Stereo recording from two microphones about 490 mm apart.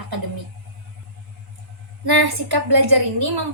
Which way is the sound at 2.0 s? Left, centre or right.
Right.